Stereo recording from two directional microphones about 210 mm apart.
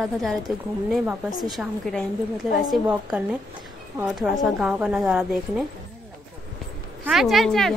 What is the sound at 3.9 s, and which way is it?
Speech, centre (ahead or behind).